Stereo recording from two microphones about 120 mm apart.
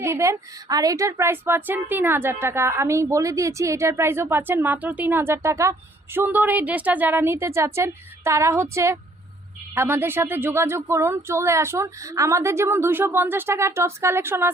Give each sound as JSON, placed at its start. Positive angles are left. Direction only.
{"t": 0.0, "sound": "a woman's voice", "side_deg": -25}